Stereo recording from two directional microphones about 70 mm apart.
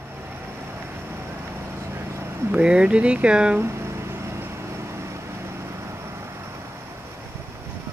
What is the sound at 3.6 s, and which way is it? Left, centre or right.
Music, right.